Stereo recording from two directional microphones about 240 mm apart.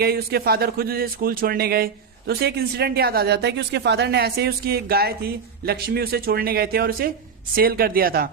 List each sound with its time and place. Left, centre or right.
0.0 s speech: right